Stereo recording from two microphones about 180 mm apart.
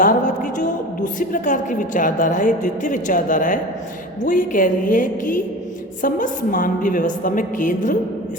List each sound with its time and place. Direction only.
0.0 s a woman's voice: 45° left (ahead or behind)